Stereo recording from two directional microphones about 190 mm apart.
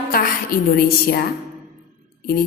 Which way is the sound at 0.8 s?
55° left (ahead or behind).